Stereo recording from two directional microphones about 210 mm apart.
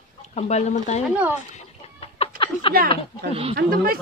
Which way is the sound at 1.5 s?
30° left (ahead or behind).